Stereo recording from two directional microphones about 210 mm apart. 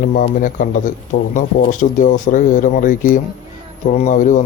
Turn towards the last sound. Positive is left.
turn(degrees=35)  # may be behind; listen again after turning